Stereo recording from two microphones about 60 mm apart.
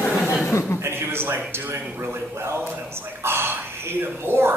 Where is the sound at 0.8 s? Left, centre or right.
Right.